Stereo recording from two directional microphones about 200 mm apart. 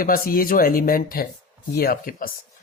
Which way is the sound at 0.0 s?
45° left (ahead or behind).